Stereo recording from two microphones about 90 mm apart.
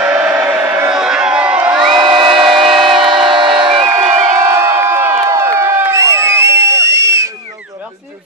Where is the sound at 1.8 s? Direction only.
60° right (ahead or behind).